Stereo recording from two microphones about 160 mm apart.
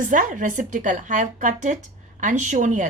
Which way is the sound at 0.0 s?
55° right (ahead or behind).